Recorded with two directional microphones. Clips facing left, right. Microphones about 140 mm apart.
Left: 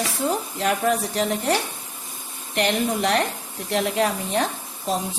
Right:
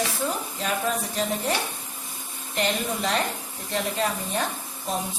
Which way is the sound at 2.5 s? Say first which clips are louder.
Left 4 dB; 70° left (ahead or behind).